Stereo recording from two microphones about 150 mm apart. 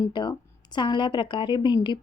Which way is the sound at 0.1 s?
30° left (ahead or behind).